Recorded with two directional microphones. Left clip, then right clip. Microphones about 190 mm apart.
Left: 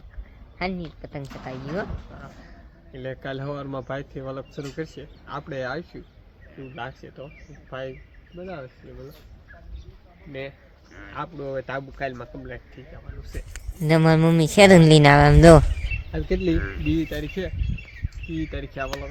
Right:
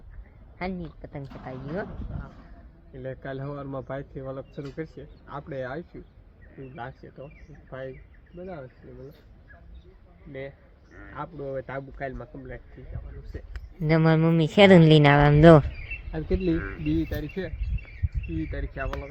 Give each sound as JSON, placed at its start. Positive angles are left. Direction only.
{"t": 0.9, "sound": "a man's voice", "side_deg": 10}
{"t": 2.9, "sound": "a man's voice", "side_deg": 10}
{"t": 6.6, "sound": "a man's voice", "side_deg": 5}
{"t": 11.0, "sound": "a man's voice", "side_deg": 10}
{"t": 13.8, "sound": "a man's voice", "side_deg": 5}
{"t": 16.1, "sound": "speech", "side_deg": -10}
{"t": 18.5, "sound": "a man's voice", "side_deg": 15}